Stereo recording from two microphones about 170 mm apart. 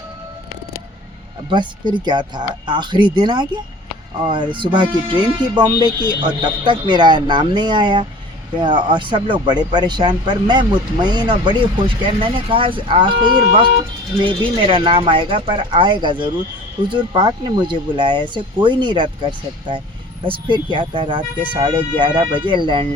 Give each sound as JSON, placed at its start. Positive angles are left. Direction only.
{"t": 1.5, "sound": "speech", "side_deg": -25}